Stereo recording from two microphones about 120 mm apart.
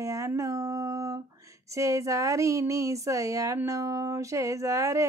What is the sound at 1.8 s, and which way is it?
Speech, 25° right (ahead or behind).